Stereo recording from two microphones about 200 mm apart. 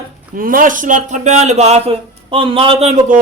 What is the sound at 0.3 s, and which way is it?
Speech, 45° right (ahead or behind).